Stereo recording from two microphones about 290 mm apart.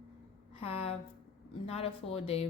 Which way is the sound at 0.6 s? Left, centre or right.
Centre.